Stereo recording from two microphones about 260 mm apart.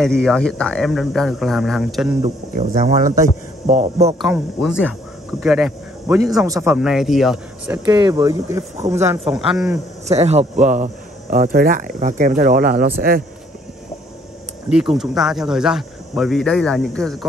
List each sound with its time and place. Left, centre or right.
0.0 s speech: centre
2.2 s speech: right
4.2 s speech: centre
10.0 s speech: right
14.7 s speech: centre